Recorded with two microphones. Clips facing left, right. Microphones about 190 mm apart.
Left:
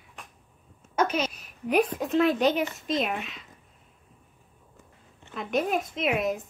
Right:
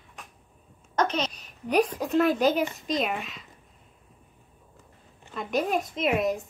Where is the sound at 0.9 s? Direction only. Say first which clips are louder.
Even; 10° left (ahead or behind).